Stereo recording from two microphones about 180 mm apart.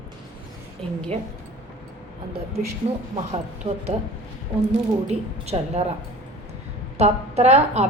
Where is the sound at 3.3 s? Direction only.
35° right (ahead or behind).